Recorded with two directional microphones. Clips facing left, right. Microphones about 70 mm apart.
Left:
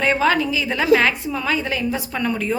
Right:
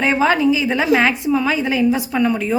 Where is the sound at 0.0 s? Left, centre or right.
Centre.